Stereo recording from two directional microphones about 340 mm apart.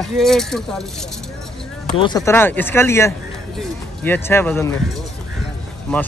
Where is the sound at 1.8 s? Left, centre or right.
Centre.